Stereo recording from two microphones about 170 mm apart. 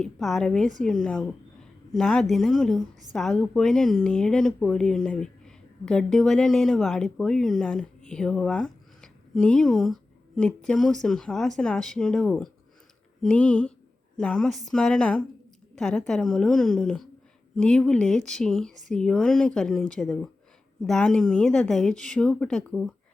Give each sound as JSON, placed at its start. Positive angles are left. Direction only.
{"t": 0.0, "sound": "a woman's voice", "side_deg": 0}